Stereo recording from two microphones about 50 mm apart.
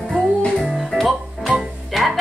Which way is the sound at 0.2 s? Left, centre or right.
Centre.